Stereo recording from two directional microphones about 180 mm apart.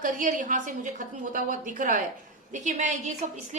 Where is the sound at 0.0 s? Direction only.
45° right (ahead or behind).